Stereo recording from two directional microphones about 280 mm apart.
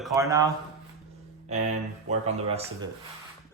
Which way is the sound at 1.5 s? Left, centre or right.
Right.